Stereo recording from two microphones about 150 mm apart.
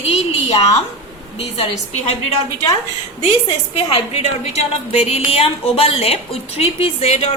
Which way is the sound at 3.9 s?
45° left (ahead or behind).